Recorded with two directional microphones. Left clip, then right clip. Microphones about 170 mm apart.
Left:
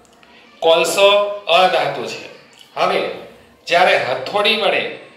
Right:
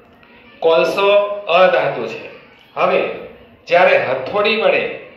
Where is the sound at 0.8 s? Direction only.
5° left (ahead or behind).